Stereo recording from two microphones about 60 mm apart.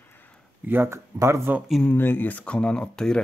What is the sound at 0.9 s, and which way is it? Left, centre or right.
Speech, right.